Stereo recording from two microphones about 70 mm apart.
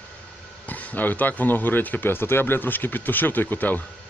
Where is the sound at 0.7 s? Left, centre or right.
Left.